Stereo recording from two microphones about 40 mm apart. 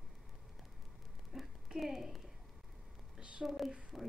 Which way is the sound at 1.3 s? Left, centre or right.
Centre.